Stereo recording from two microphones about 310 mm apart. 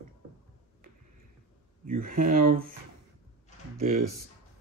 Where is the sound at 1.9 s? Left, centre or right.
Right.